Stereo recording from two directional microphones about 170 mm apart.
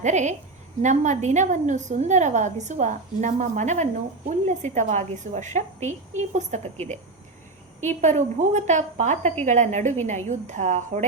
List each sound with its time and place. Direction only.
0.0 s a woman's voice: 45° right (ahead or behind)